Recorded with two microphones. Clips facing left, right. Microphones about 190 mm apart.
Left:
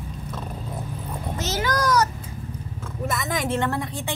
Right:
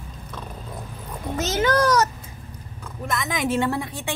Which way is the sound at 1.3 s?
25° right (ahead or behind).